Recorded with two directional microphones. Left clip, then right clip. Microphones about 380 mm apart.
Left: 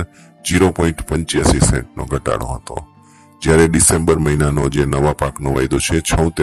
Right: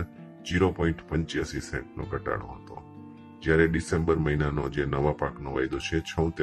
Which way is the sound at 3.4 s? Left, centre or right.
Left.